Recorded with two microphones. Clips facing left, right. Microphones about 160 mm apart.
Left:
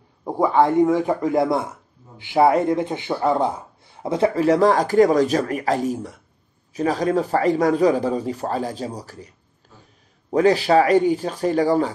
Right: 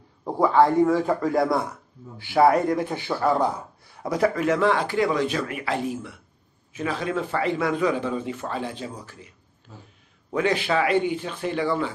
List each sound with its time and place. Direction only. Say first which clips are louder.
0.2 s a man's voice: left 1 dB; 15° left (ahead or behind); by 9.3 s 40° left (ahead or behind)
10.3 s speech: left 7 dB; 35° left (ahead or behind)